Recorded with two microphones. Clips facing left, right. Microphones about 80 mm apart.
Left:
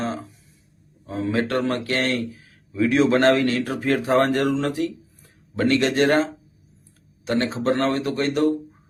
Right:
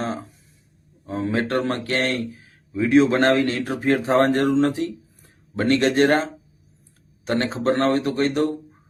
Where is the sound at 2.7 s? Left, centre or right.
Right.